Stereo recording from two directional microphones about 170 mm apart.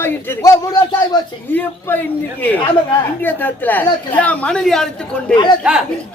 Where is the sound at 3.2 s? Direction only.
10° left (ahead or behind).